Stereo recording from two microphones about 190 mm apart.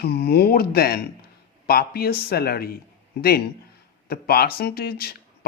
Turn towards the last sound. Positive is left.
turn(degrees=55)  # may be behind; listen again after turning